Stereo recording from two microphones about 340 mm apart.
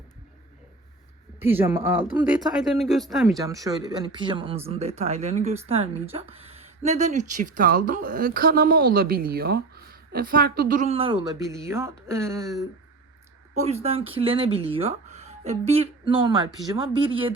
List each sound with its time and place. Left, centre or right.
1.4 s speech: centre
13.5 s a woman's voice: centre